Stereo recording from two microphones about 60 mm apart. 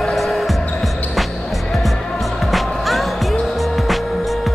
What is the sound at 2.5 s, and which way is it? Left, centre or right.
Music, centre.